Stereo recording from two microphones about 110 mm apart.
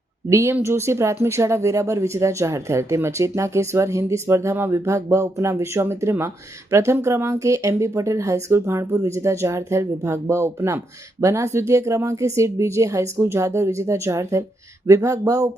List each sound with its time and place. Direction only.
0.3 s speech: 25° right (ahead or behind)